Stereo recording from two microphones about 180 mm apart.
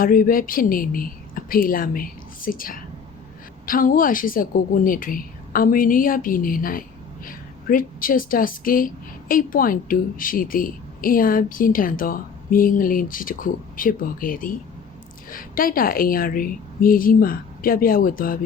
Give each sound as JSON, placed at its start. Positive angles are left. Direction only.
{"t": 0.0, "sound": "a woman's voice", "side_deg": 50}